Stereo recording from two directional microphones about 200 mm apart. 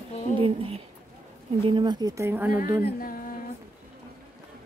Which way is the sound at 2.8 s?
45° left (ahead or behind).